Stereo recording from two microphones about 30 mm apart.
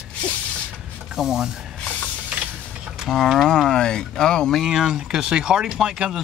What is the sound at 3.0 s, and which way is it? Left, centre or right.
Speech, centre.